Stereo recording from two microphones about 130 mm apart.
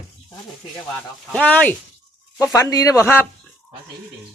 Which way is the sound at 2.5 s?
25° left (ahead or behind).